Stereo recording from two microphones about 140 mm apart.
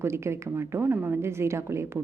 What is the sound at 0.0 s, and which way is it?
A woman's voice, 20° right (ahead or behind).